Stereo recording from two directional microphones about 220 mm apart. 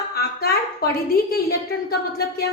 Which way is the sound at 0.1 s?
45° left (ahead or behind).